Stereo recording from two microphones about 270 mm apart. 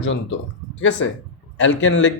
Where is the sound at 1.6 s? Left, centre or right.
Left.